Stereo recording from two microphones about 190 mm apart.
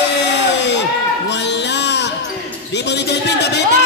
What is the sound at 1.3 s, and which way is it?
Music, 65° left (ahead or behind).